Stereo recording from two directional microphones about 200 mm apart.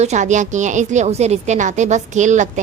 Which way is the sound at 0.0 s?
35° right (ahead or behind).